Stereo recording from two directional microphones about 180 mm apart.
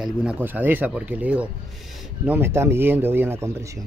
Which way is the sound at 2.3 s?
15° right (ahead or behind).